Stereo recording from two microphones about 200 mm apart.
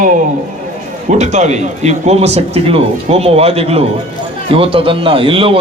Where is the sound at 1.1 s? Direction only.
35° right (ahead or behind).